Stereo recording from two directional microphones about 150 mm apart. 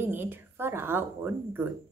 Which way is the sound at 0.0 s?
15° right (ahead or behind).